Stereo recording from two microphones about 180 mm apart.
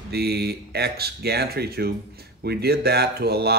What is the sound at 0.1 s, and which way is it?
Speech, 65° right (ahead or behind).